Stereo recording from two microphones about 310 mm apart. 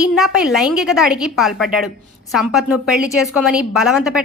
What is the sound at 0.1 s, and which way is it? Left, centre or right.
A woman's voice, centre.